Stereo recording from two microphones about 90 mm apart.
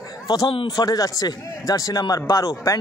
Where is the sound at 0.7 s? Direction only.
45° left (ahead or behind).